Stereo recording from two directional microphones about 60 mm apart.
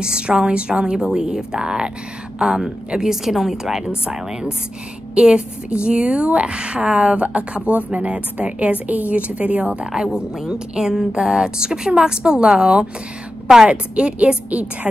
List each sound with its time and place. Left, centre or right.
0.0 s a woman's voice: centre